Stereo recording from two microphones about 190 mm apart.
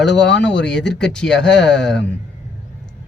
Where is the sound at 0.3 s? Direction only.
70° left (ahead or behind).